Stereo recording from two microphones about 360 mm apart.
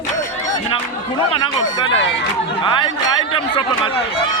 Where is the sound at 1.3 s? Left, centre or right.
Centre.